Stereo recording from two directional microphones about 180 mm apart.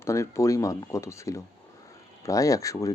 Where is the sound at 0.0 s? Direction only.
15° left (ahead or behind).